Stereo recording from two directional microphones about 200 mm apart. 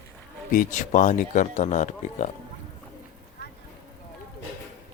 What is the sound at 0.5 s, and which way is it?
Speech, 40° left (ahead or behind).